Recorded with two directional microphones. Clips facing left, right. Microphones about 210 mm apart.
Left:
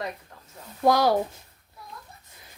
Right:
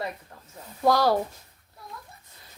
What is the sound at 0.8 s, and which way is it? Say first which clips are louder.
Speech: left 1 dB; 20° left (ahead or behind).